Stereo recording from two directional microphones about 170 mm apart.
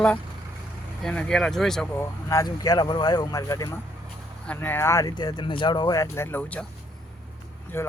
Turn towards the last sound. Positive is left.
turn(degrees=15)  # may be behind; listen again after turning